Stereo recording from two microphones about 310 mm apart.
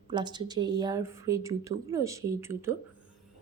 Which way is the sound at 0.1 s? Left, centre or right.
Centre.